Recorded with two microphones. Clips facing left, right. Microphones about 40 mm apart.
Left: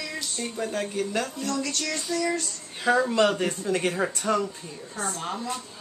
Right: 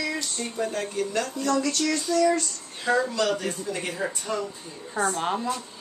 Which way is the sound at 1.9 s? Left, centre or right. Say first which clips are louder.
Right 6 dB; centre.